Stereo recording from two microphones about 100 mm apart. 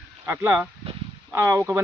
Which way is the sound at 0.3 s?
25° right (ahead or behind).